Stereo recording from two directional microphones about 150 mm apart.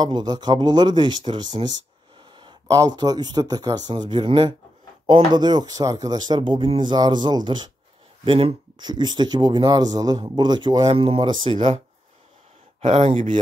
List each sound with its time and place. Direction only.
0.0 s speech: 25° right (ahead or behind)
12.8 s speech: 40° right (ahead or behind)